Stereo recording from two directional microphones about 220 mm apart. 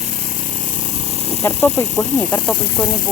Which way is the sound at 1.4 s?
15° left (ahead or behind).